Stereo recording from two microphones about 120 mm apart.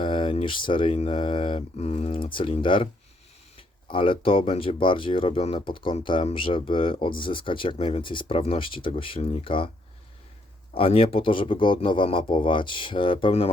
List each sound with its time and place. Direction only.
0.0 s a sound: 45° left (ahead or behind)
0.9 s speech: 50° left (ahead or behind)
10.8 s speech: 50° left (ahead or behind)